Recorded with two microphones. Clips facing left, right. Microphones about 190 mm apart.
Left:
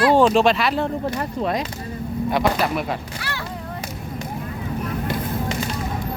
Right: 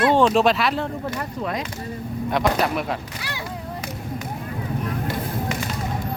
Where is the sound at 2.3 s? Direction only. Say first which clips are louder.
Even; centre (ahead or behind).